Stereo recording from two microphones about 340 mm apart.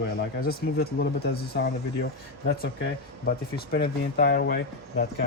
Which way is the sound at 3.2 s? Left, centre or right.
Left.